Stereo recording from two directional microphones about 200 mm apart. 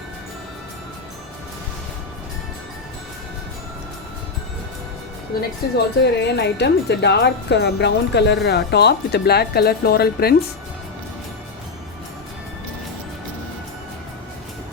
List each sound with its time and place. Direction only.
5.3 s a woman's voice: 50° left (ahead or behind)